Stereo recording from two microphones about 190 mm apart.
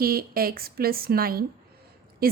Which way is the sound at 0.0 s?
50° right (ahead or behind).